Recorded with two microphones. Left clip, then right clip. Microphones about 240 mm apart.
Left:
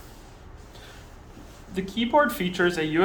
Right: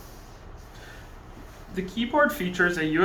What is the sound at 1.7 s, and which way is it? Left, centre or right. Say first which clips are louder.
Speech: left 3 dB; left.